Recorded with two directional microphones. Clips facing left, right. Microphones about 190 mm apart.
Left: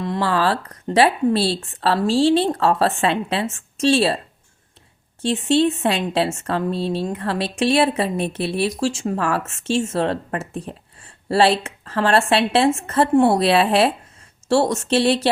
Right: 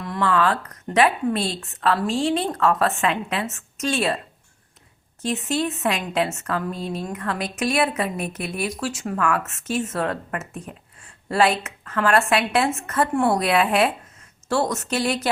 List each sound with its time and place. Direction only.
0.0 s a woman's voice: 30° left (ahead or behind)
5.2 s a woman's voice: 30° left (ahead or behind)